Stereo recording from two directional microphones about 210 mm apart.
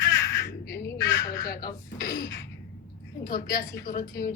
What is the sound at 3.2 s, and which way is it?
A woman's voice, 50° left (ahead or behind).